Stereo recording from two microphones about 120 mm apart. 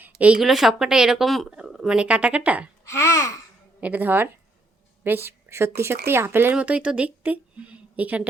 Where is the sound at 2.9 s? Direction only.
25° left (ahead or behind).